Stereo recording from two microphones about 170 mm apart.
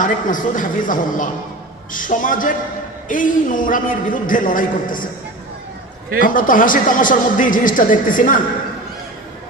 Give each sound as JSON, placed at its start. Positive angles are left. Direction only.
{"t": 0.0, "sound": "a man's voice", "side_deg": 50}
{"t": 6.1, "sound": "a man's voice", "side_deg": 55}